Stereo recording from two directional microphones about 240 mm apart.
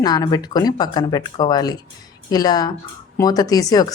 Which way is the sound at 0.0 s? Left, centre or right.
Centre.